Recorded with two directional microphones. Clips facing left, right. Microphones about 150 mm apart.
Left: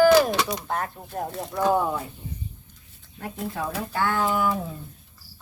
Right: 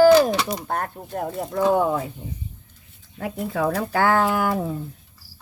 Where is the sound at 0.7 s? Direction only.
50° right (ahead or behind).